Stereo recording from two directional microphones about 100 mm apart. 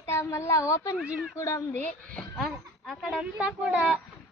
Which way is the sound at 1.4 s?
30° left (ahead or behind).